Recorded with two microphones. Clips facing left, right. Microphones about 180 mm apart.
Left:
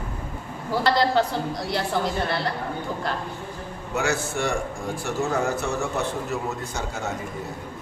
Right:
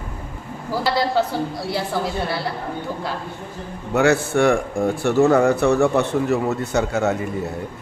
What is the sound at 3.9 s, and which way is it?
A man's voice, 60° right (ahead or behind).